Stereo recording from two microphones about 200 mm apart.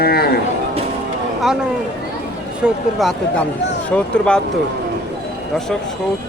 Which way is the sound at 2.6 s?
Centre (ahead or behind).